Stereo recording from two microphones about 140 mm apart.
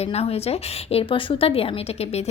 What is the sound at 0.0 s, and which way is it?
A woman's voice, 45° left (ahead or behind).